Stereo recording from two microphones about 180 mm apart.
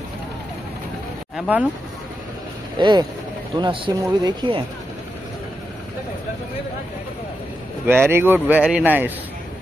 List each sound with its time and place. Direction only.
1.3 s speech: 10° right (ahead or behind)
2.8 s speech: 25° right (ahead or behind)
7.8 s speech: 10° right (ahead or behind)